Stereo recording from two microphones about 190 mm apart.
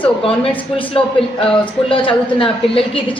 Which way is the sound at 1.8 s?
30° left (ahead or behind).